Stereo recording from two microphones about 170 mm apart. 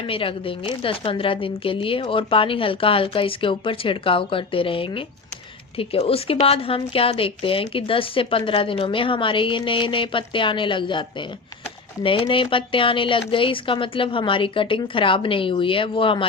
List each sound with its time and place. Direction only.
0.0 s a woman's voice: 30° left (ahead or behind)
12.0 s a woman's voice: 30° left (ahead or behind)